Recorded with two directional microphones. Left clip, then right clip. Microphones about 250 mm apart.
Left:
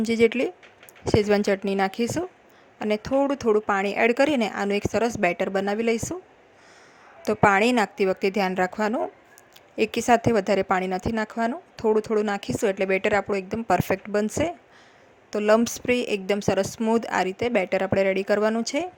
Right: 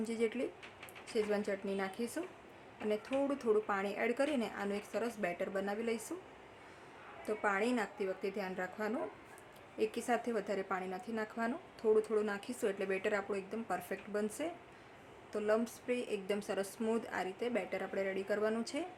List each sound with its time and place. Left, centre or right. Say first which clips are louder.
0.0 s a woman's voice: left 16 dB; left
7.3 s a woman's voice: left 16 dB; left